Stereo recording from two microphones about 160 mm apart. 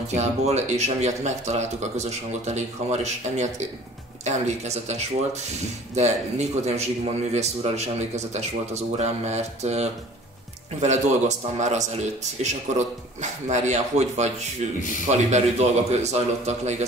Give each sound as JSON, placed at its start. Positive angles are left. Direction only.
{"t": 0.1, "sound": "speech", "side_deg": -45}